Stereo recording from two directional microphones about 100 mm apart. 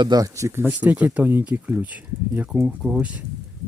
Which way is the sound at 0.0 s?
40° right (ahead or behind).